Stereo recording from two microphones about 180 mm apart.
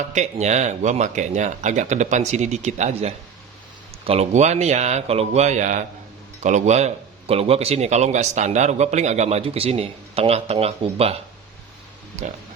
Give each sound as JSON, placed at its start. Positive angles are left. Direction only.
{"t": 0.1, "sound": "speech", "side_deg": -40}